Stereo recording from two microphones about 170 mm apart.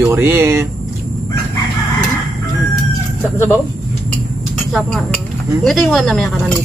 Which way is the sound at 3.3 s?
15° left (ahead or behind).